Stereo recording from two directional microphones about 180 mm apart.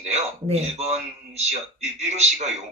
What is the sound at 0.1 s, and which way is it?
Speech, 35° right (ahead or behind).